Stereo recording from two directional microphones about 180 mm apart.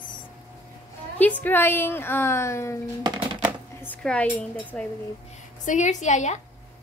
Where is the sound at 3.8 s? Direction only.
5° left (ahead or behind).